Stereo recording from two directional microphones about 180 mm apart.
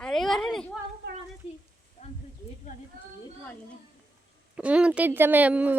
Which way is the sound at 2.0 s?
40° left (ahead or behind).